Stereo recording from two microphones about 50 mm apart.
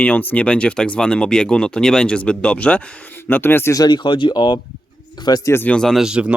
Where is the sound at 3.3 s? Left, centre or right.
Left.